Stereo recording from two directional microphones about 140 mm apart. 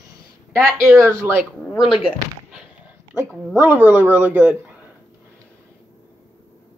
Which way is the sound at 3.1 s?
Centre (ahead or behind).